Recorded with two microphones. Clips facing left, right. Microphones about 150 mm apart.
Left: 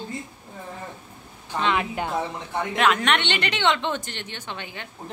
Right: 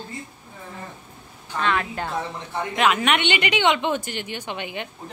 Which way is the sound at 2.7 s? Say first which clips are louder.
Right 1 dB; 5° right (ahead or behind).